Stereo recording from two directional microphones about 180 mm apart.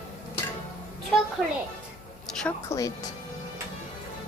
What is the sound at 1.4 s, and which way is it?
Speech, centre (ahead or behind).